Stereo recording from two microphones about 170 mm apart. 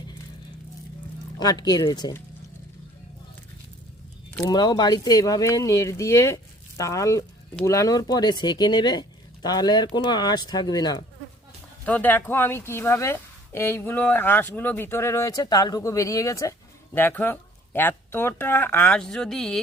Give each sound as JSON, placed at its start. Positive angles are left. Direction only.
{"t": 1.4, "sound": "speech", "side_deg": 25}
{"t": 4.4, "sound": "speech", "side_deg": 25}
{"t": 11.9, "sound": "a woman's voice", "side_deg": 10}